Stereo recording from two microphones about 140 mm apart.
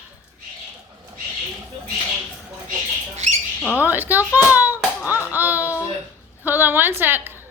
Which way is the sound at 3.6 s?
15° left (ahead or behind).